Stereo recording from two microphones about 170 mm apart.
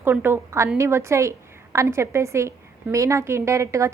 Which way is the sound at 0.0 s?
15° right (ahead or behind).